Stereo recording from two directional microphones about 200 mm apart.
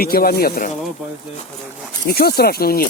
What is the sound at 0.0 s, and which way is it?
Speech, 50° left (ahead or behind).